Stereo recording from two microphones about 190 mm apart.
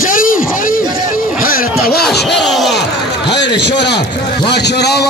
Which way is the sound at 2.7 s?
65° left (ahead or behind).